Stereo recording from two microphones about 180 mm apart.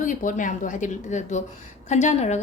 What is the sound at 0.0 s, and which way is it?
A woman's voice, 45° left (ahead or behind).